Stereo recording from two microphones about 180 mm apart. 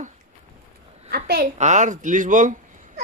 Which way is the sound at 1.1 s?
60° right (ahead or behind).